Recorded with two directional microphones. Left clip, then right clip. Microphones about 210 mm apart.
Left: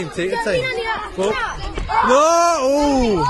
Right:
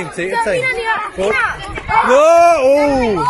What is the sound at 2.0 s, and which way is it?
Speech, centre (ahead or behind).